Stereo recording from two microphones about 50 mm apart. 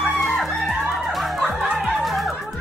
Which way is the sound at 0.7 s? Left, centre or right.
Centre.